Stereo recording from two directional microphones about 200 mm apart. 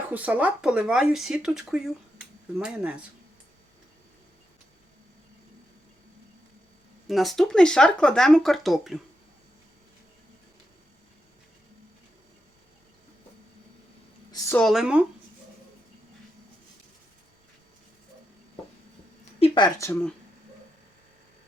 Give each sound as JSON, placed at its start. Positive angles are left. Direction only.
{"t": 0.1, "sound": "speech", "side_deg": -5}
{"t": 7.1, "sound": "speech", "side_deg": 0}
{"t": 14.3, "sound": "a woman's voice", "side_deg": 15}
{"t": 14.6, "sound": "speech", "side_deg": 0}
{"t": 19.4, "sound": "speech", "side_deg": 20}
{"t": 19.9, "sound": "speech", "side_deg": 10}